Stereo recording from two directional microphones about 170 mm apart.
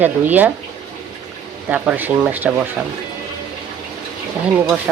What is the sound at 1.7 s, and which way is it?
Speech, 5° right (ahead or behind).